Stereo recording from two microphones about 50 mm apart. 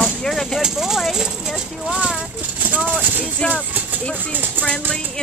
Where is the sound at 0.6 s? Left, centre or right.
Centre.